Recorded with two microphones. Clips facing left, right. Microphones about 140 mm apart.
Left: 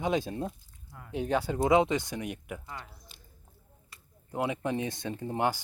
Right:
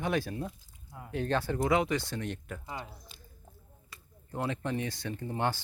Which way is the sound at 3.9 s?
90° right.